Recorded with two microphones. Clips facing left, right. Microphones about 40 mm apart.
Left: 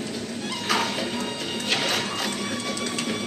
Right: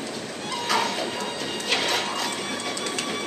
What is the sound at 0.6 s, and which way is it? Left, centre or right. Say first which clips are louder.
Music: right 1 dB; centre.